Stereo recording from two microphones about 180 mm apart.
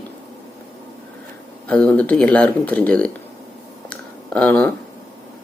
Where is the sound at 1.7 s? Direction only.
5° left (ahead or behind).